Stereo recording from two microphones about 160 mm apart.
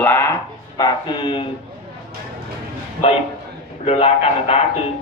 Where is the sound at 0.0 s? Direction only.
10° left (ahead or behind).